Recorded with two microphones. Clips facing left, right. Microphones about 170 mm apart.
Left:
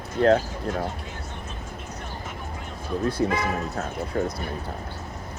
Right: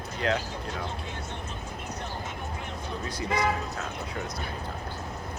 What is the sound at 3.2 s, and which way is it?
Speech, 55° left (ahead or behind).